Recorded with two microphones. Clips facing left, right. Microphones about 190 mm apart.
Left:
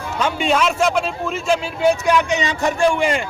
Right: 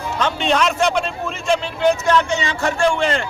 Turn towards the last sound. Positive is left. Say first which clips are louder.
# left 1 dB
turn(degrees=10)  # may be behind; listen again after turning